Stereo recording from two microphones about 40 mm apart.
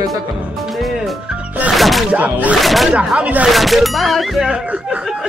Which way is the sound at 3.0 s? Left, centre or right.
Right.